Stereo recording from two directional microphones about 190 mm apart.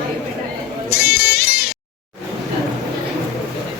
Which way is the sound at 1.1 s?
55° left (ahead or behind).